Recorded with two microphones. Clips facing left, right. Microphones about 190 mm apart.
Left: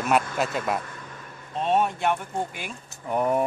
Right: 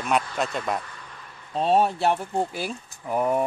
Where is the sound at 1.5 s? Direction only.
35° right (ahead or behind).